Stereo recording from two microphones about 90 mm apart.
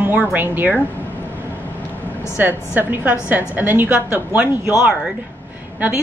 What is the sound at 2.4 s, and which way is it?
A woman's voice, 20° right (ahead or behind).